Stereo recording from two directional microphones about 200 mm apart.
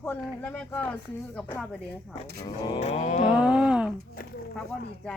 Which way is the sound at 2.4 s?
30° left (ahead or behind).